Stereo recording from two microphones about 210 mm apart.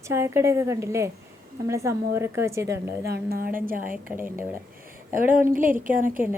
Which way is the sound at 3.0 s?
50° right (ahead or behind).